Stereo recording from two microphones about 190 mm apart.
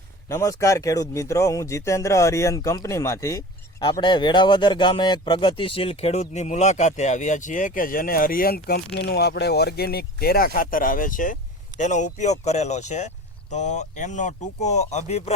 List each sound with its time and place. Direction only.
0.3 s a man's voice: 15° left (ahead or behind); by 15.3 s 35° left (ahead or behind)